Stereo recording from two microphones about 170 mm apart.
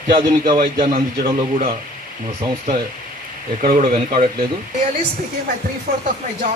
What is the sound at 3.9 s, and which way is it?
Speech, 40° right (ahead or behind).